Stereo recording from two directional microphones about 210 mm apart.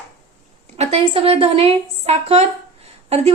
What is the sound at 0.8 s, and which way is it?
A woman's voice, 30° right (ahead or behind).